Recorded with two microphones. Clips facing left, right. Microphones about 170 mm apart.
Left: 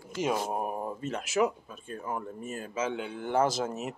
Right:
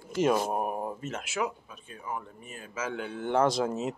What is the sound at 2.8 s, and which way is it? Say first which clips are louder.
Speech: left 2 dB; 25° left (ahead or behind).